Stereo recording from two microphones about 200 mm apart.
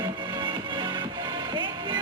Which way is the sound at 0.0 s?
20° right (ahead or behind).